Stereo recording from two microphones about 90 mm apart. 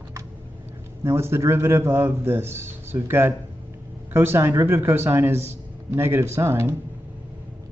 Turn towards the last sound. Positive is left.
turn(degrees=-30)  # may be behind; listen again after turning